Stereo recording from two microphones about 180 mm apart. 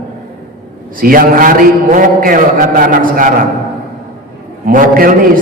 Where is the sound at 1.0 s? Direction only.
50° right (ahead or behind).